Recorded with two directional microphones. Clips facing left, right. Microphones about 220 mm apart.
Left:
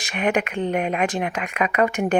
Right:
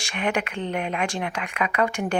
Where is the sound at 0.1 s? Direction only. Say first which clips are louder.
Left 4 dB; 20° left (ahead or behind).